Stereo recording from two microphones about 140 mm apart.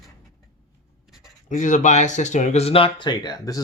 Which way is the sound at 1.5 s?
60° left (ahead or behind).